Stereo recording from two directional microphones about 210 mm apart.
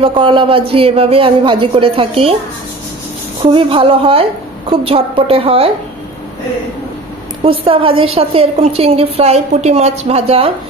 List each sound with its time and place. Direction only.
0.0 s a woman's voice: 25° right (ahead or behind)
3.4 s a woman's voice: 25° right (ahead or behind)
7.4 s a woman's voice: 25° right (ahead or behind)